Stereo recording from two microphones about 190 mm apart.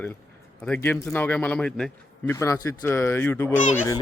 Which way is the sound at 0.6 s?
10° left (ahead or behind).